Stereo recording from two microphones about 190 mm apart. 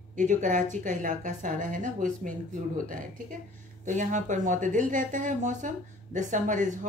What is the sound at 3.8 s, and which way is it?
Speech, 40° right (ahead or behind).